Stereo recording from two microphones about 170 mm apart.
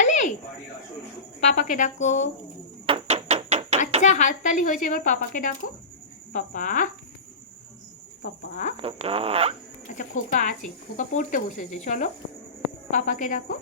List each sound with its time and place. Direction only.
0.0 s a sound: 45° left (ahead or behind)
1.4 s speech: 45° left (ahead or behind)
2.8 s a sound: 35° right (ahead or behind)
4.0 s speech: 45° left (ahead or behind)
8.8 s speech: 35° right (ahead or behind)
9.9 s speech: 50° left (ahead or behind)